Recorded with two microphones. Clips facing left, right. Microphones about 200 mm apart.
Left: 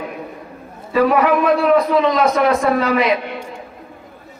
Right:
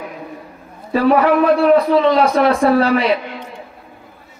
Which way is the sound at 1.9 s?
30° right (ahead or behind).